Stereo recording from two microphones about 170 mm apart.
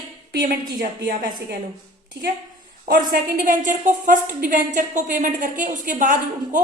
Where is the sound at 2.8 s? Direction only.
60° right (ahead or behind).